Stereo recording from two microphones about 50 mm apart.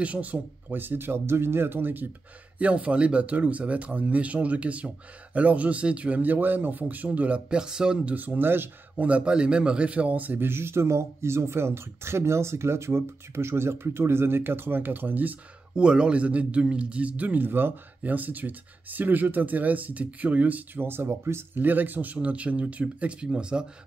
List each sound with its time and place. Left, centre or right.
0.0 s speech: right
0.7 s speech: right
2.6 s speech: right
6.3 s speech: right
7.4 s speech: centre
8.0 s speech: right
8.9 s speech: right
10.5 s speech: right
15.7 s speech: centre
17.4 s speech: right
20.8 s speech: right
21.5 s speech: right; by 23.6 s centre